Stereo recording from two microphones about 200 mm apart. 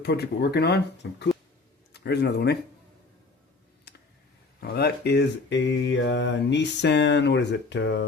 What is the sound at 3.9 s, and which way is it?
Tick, 55° left (ahead or behind).